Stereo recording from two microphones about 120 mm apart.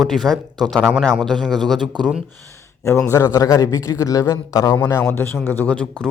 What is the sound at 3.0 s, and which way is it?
A man's voice, 25° left (ahead or behind).